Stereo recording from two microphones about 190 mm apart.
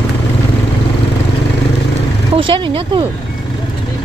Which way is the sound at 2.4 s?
25° right (ahead or behind).